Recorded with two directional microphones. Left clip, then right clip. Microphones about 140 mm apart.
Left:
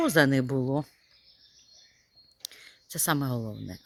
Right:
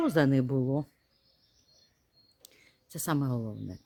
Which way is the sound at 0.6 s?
15° left (ahead or behind).